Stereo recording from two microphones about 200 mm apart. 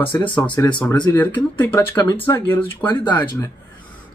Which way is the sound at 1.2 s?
10° left (ahead or behind).